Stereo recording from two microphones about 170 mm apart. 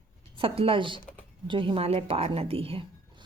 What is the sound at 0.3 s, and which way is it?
A woman's voice, 35° right (ahead or behind).